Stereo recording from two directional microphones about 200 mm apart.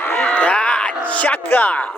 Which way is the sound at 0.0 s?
10° left (ahead or behind).